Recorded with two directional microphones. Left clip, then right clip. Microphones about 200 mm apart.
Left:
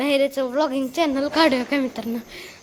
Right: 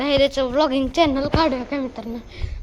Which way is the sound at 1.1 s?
15° left (ahead or behind).